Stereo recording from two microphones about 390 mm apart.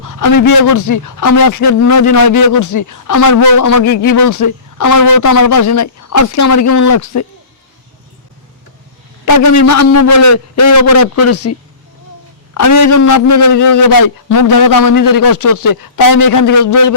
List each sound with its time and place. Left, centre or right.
0.1 s speech: left
9.2 s speech: left
12.5 s speech: left